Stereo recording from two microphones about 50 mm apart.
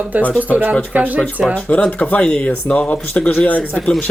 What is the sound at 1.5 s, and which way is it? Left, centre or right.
Speech, left.